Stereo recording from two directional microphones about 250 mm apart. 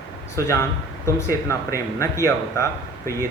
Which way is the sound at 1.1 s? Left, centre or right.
Centre.